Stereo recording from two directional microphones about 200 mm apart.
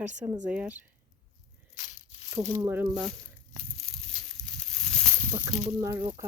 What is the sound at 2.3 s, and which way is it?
Speech, 15° right (ahead or behind).